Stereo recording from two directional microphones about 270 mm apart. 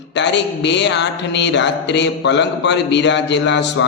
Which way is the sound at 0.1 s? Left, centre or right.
Left.